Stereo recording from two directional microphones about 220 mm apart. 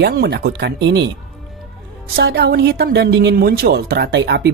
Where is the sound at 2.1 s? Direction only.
50° right (ahead or behind).